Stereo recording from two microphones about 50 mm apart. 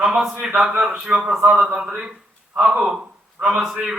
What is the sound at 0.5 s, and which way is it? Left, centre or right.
A man's voice, right.